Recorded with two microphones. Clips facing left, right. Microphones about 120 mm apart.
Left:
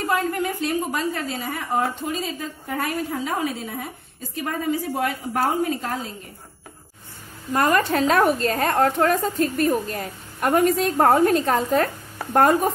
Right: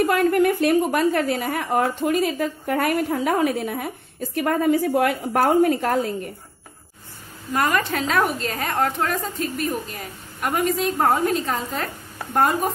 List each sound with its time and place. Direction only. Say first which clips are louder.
0.1 s a woman's voice: right 5 dB; 60° right (ahead or behind)
7.5 s a woman's voice: left 2 dB; 35° left (ahead or behind)
11.2 s speech: left 4 dB; 55° left (ahead or behind)